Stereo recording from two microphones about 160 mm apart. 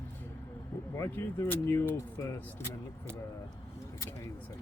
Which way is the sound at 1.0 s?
15° left (ahead or behind).